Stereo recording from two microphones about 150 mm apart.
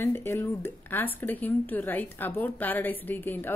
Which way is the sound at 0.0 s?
15° left (ahead or behind).